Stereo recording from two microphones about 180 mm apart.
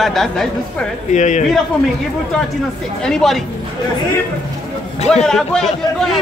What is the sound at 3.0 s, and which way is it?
Speech, centre (ahead or behind).